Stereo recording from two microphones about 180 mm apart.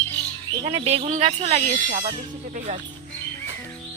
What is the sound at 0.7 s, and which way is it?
Speech, 35° right (ahead or behind).